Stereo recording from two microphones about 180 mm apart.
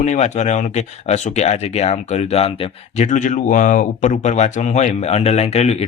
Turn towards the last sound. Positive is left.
turn(degrees=35)  # may be behind; listen again after turning